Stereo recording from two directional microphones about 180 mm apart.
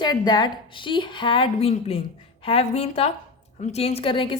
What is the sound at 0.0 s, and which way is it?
A woman's voice, 25° left (ahead or behind).